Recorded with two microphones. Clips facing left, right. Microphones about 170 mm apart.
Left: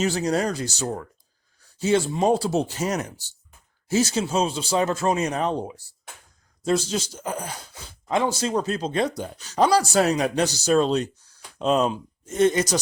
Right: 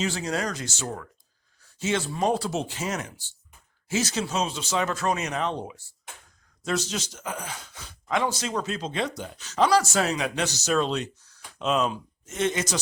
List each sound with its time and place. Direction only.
0.0 s speech: 40° left (ahead or behind)